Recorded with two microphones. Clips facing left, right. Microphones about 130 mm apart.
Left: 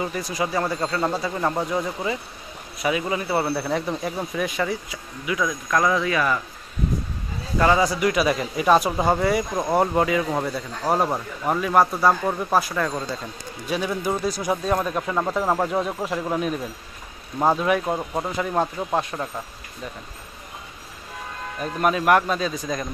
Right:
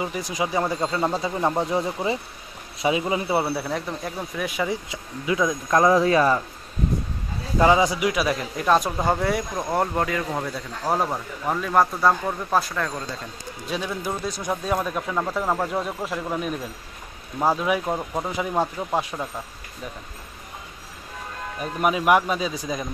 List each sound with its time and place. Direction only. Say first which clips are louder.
0.0 s speech: left 1 dB; 15° right (ahead or behind)
1.6 s speech: right 1 dB; 25° right (ahead or behind)
3.4 s speech: left 3 dB; centre (ahead or behind)
4.6 s speech: even; 25° right (ahead or behind)
7.5 s speech: right 1 dB; 15° right (ahead or behind)
8.1 s speech: left 3 dB; centre (ahead or behind)
17.6 s speech: left 2 dB; centre (ahead or behind)
18.2 s speech: even; 10° right (ahead or behind)
21.5 s speech: left 1 dB; 10° right (ahead or behind)